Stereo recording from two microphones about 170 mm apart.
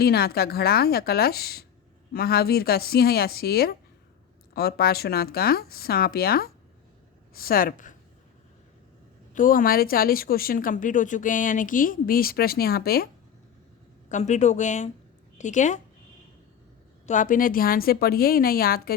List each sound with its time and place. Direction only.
0.0 s speech: 65° left (ahead or behind)
9.3 s speech: 55° left (ahead or behind)
14.1 s speech: 45° left (ahead or behind)
17.1 s speech: 50° left (ahead or behind)